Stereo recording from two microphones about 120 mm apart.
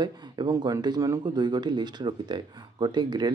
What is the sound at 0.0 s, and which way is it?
Speech, 35° right (ahead or behind).